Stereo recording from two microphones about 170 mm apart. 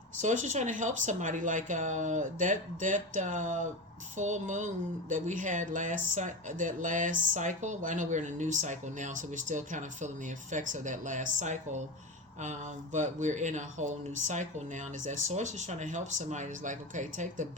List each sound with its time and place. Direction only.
0.2 s speech: 45° right (ahead or behind)